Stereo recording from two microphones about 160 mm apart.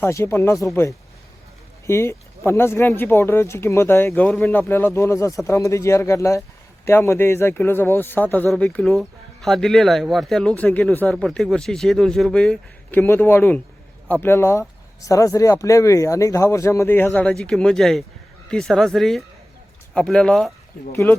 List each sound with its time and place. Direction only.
0.0 s speech: 15° left (ahead or behind)
20.9 s speech: 15° left (ahead or behind)